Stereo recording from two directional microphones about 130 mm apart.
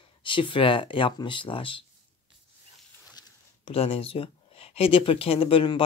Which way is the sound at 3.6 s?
50° left (ahead or behind).